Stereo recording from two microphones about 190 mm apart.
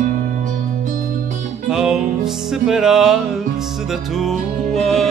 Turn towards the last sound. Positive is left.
turn(degrees=0)  # may be behind; listen again after turning